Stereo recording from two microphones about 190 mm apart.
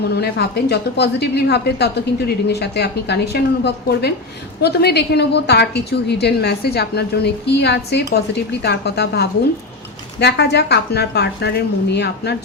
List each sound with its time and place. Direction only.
0.2 s a woman's voice: 60° left (ahead or behind)